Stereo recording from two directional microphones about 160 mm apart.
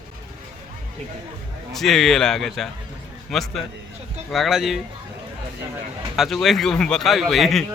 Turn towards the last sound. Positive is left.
turn(degrees=0)  # may be behind; listen again after turning